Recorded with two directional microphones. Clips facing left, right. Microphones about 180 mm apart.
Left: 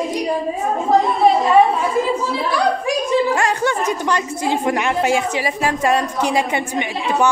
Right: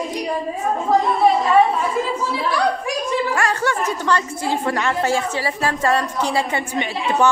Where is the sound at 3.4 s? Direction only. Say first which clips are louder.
Left 2 dB; 20° left (ahead or behind).